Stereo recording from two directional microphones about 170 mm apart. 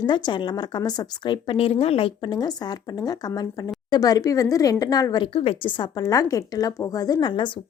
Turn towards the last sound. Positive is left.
turn(degrees=25)  # may be behind; listen again after turning